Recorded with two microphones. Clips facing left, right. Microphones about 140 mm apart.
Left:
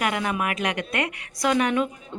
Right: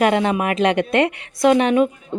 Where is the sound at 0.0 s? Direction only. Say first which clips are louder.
Right 8 dB; 30° right (ahead or behind).